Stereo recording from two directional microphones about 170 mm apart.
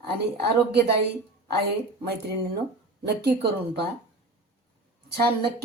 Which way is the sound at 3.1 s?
70° right (ahead or behind).